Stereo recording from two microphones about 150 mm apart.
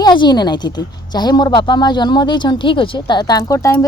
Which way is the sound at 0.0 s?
30° left (ahead or behind).